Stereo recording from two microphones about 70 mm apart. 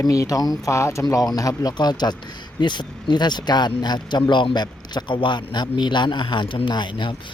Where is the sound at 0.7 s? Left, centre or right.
Left.